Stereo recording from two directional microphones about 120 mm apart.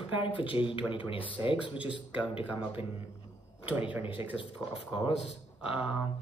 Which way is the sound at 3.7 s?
15° right (ahead or behind).